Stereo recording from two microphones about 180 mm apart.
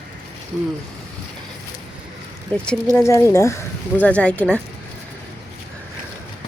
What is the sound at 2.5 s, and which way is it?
Speech, 5° left (ahead or behind).